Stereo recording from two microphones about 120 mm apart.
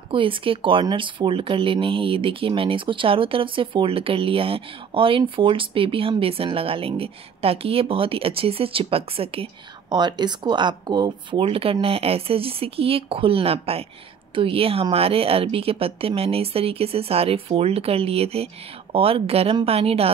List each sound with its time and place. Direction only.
0.1 s a woman's voice: 45° right (ahead or behind)